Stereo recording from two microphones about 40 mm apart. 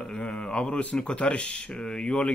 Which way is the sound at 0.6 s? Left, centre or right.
Left.